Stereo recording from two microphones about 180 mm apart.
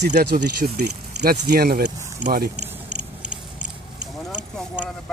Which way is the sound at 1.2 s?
55° right (ahead or behind).